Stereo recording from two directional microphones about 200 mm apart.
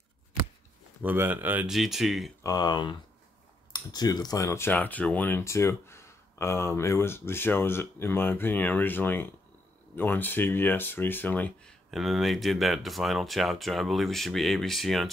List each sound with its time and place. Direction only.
1.0 s speech: 10° right (ahead or behind)
2.4 s speech: 20° left (ahead or behind); by 15.0 s centre (ahead or behind)